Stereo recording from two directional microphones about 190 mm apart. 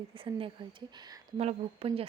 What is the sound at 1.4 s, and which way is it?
Speech, 30° right (ahead or behind).